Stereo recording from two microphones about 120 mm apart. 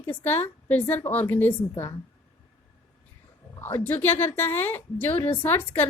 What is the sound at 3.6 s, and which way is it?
A woman's voice, 15° left (ahead or behind).